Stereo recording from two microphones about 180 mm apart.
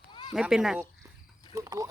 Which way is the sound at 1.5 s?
20° right (ahead or behind).